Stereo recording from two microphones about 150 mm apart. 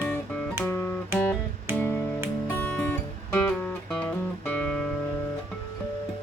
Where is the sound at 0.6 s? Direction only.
15° left (ahead or behind).